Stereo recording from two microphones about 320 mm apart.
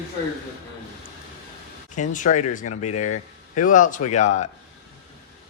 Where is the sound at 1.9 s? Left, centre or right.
Left.